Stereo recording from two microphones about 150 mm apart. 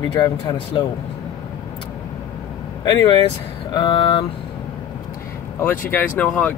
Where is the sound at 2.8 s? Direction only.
30° left (ahead or behind).